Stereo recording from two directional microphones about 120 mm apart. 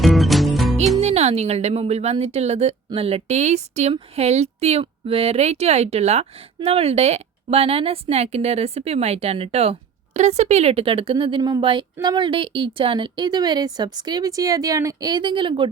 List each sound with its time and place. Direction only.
0.0 s music: centre (ahead or behind)
0.9 s speech: 65° right (ahead or behind)
10.2 s a woman's voice: 70° right (ahead or behind); by 15.1 s 30° right (ahead or behind)
15.1 s a woman's voice: 45° right (ahead or behind)